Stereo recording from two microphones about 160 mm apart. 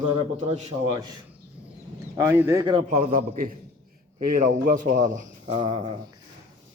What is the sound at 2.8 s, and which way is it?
A man's voice, 55° right (ahead or behind).